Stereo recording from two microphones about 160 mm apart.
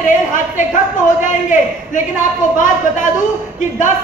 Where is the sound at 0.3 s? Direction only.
50° left (ahead or behind).